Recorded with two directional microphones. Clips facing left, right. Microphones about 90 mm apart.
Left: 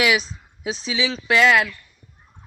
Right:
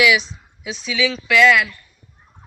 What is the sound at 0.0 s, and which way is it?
A man's voice, 40° left (ahead or behind).